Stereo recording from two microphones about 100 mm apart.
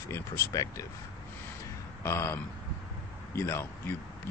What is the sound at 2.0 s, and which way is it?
Speech, 25° left (ahead or behind).